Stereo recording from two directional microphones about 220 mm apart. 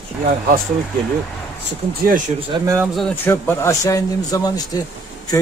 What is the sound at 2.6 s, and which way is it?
Speech, 10° right (ahead or behind).